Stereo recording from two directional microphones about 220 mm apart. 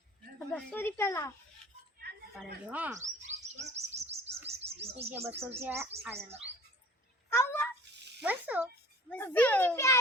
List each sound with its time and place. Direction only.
0.5 s a child's voice: 10° left (ahead or behind)
2.6 s a child's voice: 5° right (ahead or behind)
3.2 s bird: 30° right (ahead or behind)
5.1 s a child's voice: 10° right (ahead or behind)
7.3 s a sound: 10° left (ahead or behind)
8.2 s a child's voice: 5° right (ahead or behind)
9.0 s a child's voice: 10° left (ahead or behind)